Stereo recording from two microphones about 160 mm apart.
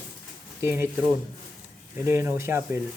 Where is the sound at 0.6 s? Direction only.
15° right (ahead or behind).